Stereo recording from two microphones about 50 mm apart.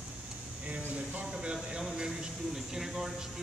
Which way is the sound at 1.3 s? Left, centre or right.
Centre.